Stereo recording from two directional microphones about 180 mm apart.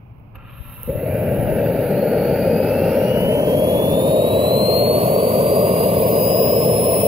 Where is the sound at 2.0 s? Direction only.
Centre (ahead or behind).